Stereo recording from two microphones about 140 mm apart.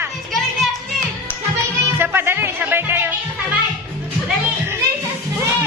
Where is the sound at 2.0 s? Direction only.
15° right (ahead or behind).